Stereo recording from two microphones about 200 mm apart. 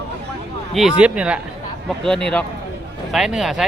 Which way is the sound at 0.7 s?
Centre (ahead or behind).